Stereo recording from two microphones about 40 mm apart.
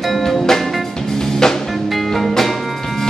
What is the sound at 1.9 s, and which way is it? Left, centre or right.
Music, centre.